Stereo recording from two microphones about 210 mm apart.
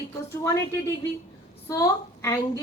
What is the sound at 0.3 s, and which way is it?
Speech, 15° left (ahead or behind).